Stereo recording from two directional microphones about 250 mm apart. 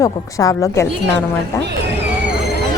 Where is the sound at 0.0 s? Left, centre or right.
Centre.